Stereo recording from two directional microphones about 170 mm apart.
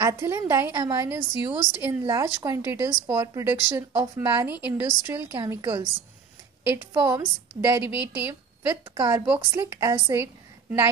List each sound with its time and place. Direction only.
0.0 s a woman's voice: 15° right (ahead or behind)
7.0 s a woman's voice: 15° right (ahead or behind)